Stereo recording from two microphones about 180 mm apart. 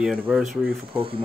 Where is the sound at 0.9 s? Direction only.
30° right (ahead or behind).